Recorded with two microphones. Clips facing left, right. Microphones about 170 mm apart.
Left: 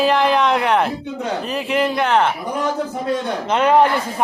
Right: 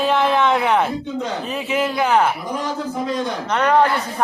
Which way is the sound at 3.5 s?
25° left (ahead or behind).